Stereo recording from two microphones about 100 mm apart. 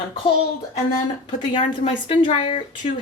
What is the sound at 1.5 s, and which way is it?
Speech, 60° left (ahead or behind).